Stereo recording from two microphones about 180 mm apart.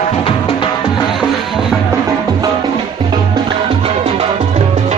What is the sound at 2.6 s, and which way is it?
Music, 25° right (ahead or behind).